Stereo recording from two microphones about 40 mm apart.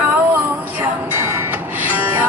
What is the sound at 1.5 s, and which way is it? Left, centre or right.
Music, right.